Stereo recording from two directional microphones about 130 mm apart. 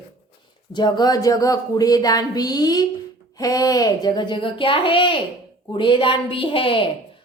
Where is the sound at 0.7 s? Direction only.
35° left (ahead or behind).